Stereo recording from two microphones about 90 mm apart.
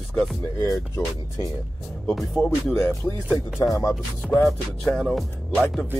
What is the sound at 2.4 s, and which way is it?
Speech, 10° left (ahead or behind).